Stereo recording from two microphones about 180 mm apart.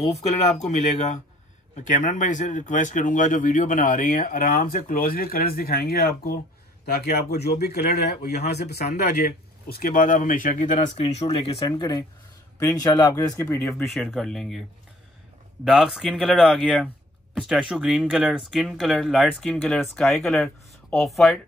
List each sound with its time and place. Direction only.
0.7 s speech: 40° left (ahead or behind); by 13.8 s 15° left (ahead or behind)
13.8 s speech: centre (ahead or behind)
15.6 s speech: centre (ahead or behind)